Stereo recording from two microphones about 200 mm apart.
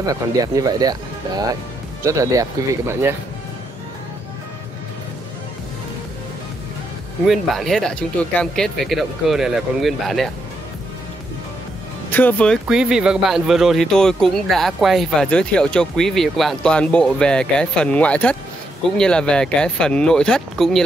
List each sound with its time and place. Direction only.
0.0 s speech: 20° right (ahead or behind)
7.2 s speech: centre (ahead or behind)
12.1 s speech: 10° left (ahead or behind)
12.6 s speech: 5° right (ahead or behind)